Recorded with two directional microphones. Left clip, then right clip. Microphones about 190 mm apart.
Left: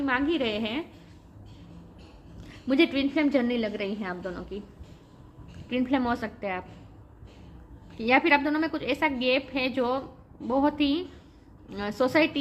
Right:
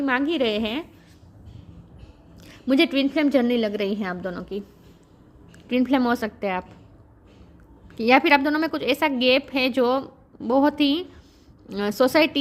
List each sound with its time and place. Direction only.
0.0 s a woman's voice: 50° right (ahead or behind)
2.4 s a woman's voice: 55° right (ahead or behind)
5.6 s a woman's voice: 50° right (ahead or behind)
7.9 s a woman's voice: 55° right (ahead or behind)